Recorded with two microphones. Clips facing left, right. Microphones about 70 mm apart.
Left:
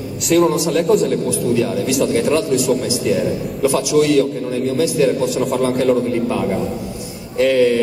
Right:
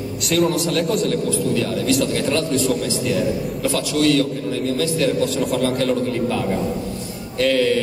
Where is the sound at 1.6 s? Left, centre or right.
Centre.